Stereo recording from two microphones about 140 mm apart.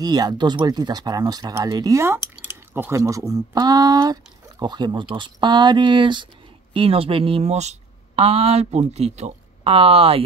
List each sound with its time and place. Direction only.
0.0 s speech: 30° right (ahead or behind)